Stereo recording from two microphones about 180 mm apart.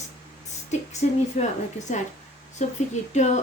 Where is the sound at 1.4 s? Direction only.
40° left (ahead or behind).